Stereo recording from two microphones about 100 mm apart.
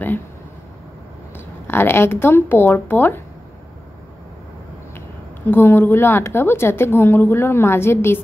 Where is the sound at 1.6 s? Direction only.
25° left (ahead or behind).